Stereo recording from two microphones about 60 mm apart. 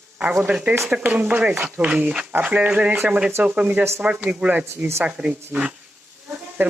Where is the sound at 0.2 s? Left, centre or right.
Centre.